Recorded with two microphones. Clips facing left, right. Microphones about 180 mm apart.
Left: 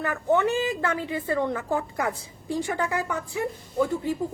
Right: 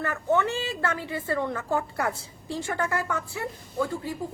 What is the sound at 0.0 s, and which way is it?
A woman's voice, 15° left (ahead or behind).